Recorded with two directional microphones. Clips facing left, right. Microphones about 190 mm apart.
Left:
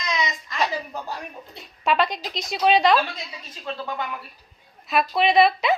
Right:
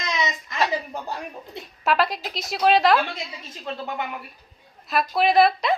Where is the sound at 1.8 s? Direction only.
Centre (ahead or behind).